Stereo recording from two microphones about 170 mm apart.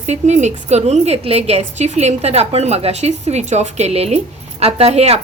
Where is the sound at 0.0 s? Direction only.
40° right (ahead or behind).